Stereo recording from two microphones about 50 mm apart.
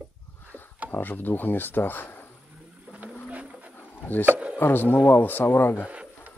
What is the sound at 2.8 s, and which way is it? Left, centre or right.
Vehicle, right.